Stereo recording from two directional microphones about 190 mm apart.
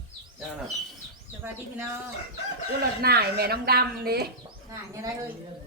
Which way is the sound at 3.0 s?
55° right (ahead or behind).